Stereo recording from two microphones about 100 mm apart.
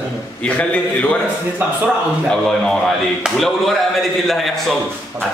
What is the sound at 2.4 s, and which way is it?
A man's voice, 5° left (ahead or behind).